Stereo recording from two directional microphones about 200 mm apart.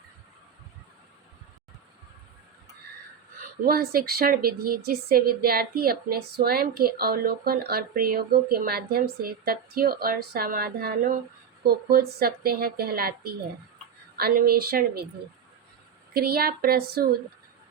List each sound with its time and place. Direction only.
3.7 s speech: 50° right (ahead or behind)
16.1 s speech: 50° right (ahead or behind)